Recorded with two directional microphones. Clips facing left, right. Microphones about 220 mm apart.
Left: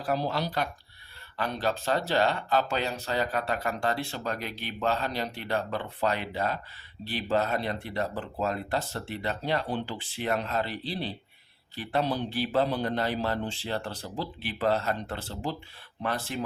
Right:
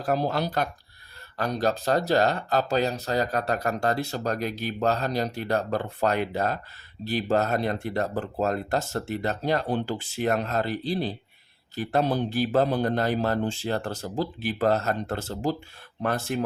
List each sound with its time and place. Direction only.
0.0 s speech: 45° right (ahead or behind)